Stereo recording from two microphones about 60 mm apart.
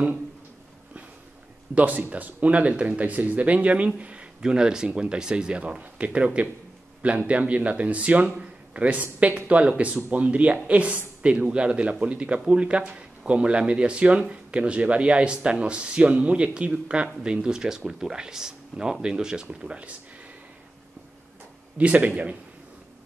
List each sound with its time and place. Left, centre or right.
1.8 s speech: right
21.7 s speech: right